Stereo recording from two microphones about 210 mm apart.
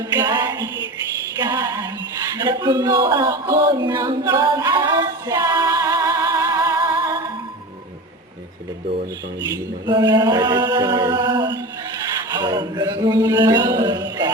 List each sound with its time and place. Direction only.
0.2 s music: 20° right (ahead or behind)
2.3 s speech: 20° right (ahead or behind)
9.8 s a sound: 20° right (ahead or behind)